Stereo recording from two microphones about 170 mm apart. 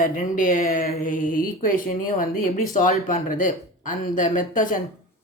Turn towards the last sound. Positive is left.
turn(degrees=50)  # may be behind; listen again after turning